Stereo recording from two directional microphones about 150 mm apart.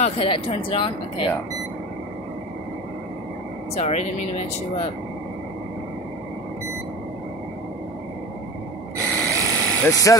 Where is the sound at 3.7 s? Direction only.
45° left (ahead or behind).